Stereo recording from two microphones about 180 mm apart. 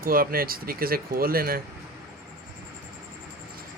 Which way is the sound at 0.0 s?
55° right (ahead or behind).